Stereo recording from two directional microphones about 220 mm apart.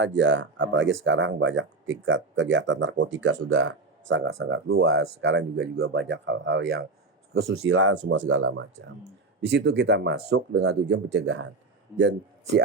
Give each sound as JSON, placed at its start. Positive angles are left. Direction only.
{"t": 0.0, "sound": "speech", "side_deg": -55}
{"t": 7.6, "sound": "speech", "side_deg": -65}